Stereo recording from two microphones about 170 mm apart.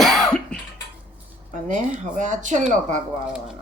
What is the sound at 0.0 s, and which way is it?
Cough, centre (ahead or behind).